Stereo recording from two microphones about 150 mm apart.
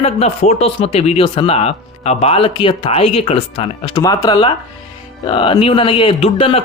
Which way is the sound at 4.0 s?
25° left (ahead or behind).